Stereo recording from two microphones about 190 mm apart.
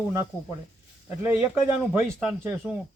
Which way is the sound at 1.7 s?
5° right (ahead or behind).